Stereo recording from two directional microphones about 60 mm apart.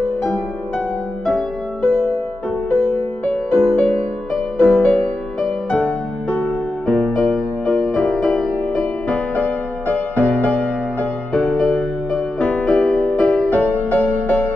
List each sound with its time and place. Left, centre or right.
1.8 s music: centre
5.8 s music: left
6.9 s music: centre; by 10.3 s left
11.5 s music: centre
12.4 s music: centre
13.5 s music: left